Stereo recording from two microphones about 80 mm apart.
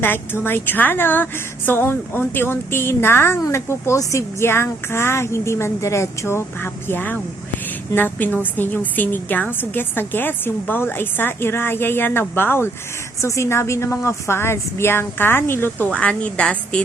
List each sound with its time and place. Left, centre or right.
0.0 s a woman's voice: left
15.9 s a woman's voice: centre